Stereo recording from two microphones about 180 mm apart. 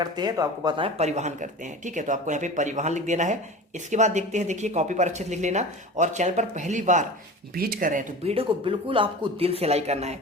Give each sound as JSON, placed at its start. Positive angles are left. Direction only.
{"t": 0.0, "sound": "speech", "side_deg": -20}
{"t": 0.9, "sound": "speech", "side_deg": -40}
{"t": 7.5, "sound": "speech", "side_deg": -55}
{"t": 8.2, "sound": "speech", "side_deg": -35}